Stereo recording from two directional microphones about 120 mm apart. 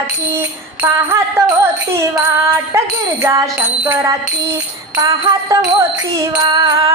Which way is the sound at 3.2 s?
25° right (ahead or behind).